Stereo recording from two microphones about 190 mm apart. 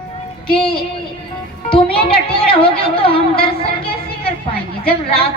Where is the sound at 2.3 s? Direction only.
30° left (ahead or behind).